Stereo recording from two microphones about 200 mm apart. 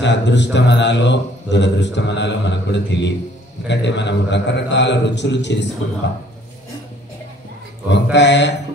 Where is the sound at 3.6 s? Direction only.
60° left (ahead or behind).